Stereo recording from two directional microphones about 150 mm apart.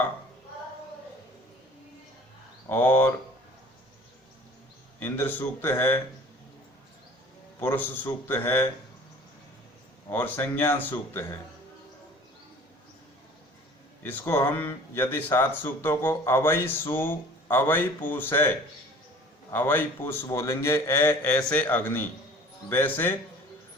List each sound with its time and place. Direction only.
2.6 s speech: 10° left (ahead or behind)
4.9 s speech: 15° left (ahead or behind)
7.6 s speech: 15° left (ahead or behind)
10.1 s speech: 15° left (ahead or behind)
14.0 s speech: 15° left (ahead or behind)